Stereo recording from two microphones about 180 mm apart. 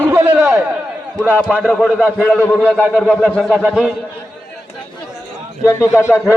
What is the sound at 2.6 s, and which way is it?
Speech, 5° right (ahead or behind).